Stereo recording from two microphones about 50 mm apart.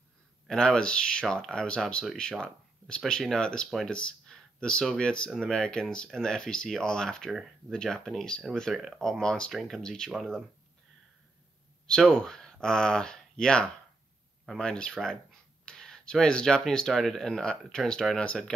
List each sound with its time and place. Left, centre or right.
0.5 s speech: centre
3.9 s a sound: centre
4.8 s speech: centre
9.5 s speech: centre
9.8 s speech: centre
11.9 s speech: centre